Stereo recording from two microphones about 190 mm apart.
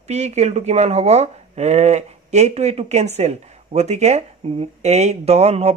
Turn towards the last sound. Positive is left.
turn(degrees=-35)  # may be behind; listen again after turning